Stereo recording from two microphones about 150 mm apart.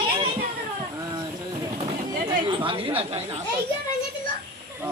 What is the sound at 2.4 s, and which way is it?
Speech, 35° right (ahead or behind).